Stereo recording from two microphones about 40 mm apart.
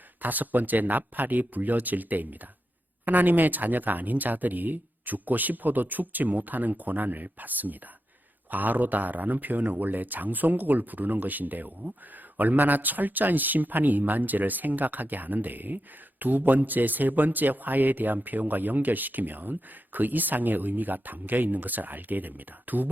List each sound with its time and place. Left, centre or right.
0.2 s speech: right